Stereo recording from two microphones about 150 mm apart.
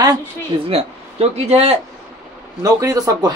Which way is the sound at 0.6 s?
45° right (ahead or behind).